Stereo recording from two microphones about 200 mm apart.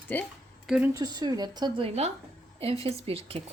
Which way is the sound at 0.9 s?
20° right (ahead or behind).